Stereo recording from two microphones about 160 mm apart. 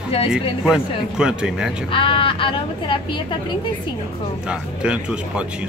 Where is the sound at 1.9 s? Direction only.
35° left (ahead or behind).